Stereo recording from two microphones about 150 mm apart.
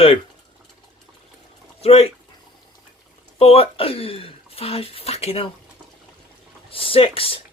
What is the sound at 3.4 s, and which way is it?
Speech, 40° left (ahead or behind).